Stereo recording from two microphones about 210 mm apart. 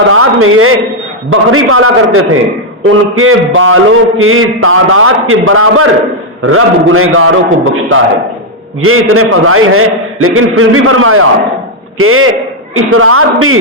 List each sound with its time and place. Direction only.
0.1 s a man's voice: 80° right
3.2 s a man's voice: 75° right (ahead or behind)